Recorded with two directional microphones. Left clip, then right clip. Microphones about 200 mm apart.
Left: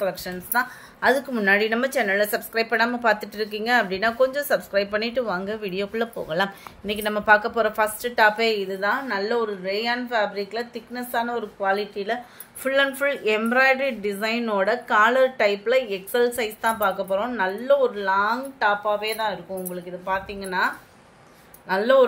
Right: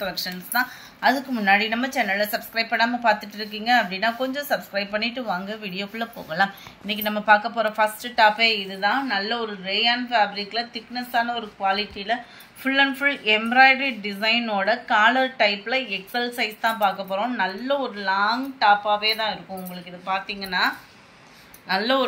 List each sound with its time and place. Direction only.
0.0 s a woman's voice: 50° left (ahead or behind)